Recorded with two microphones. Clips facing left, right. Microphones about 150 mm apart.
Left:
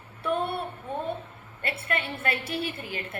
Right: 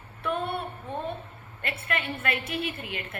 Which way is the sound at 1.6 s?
30° left (ahead or behind).